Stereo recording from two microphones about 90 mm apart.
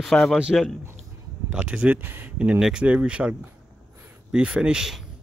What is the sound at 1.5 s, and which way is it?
Speech, 10° right (ahead or behind).